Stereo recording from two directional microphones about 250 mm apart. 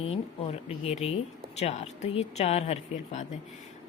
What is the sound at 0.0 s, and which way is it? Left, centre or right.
A woman's voice, left.